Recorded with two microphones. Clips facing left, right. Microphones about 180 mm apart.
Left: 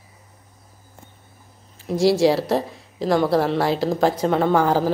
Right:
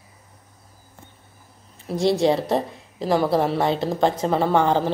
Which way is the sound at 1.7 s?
Centre (ahead or behind).